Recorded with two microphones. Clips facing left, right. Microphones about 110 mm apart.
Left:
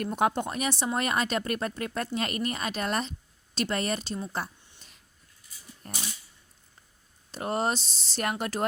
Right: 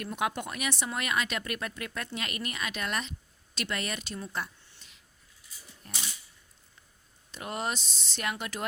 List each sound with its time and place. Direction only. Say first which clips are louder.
0.0 s speech: left 6 dB; 40° left (ahead or behind)
5.8 s dog: left 3 dB; 45° left (ahead or behind)
7.3 s speech: left 6 dB; 40° left (ahead or behind)